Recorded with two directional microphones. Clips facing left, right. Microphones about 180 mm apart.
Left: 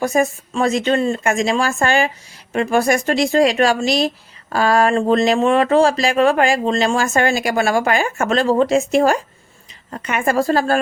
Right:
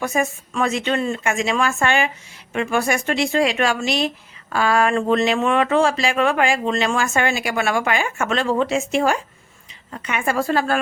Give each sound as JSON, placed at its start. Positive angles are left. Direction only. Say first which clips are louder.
{"t": 0.0, "sound": "speech", "louder": "left 5 dB", "side_deg": 35}